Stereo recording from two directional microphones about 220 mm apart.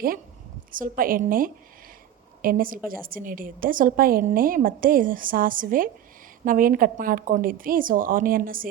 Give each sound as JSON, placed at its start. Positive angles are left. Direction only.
{"t": 0.7, "sound": "a woman's voice", "side_deg": -40}